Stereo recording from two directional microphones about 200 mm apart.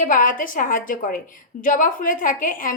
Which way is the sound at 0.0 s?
40° left (ahead or behind).